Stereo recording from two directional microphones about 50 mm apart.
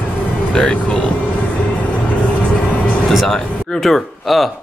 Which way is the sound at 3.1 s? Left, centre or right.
Centre.